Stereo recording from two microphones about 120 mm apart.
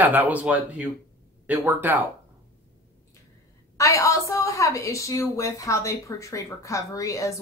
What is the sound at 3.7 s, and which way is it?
A woman's voice, 25° left (ahead or behind).